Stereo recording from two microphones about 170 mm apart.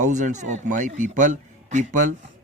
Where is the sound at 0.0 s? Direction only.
45° right (ahead or behind).